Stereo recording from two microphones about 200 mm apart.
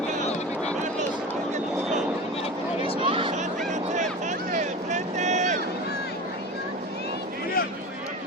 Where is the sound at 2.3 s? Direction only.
30° left (ahead or behind).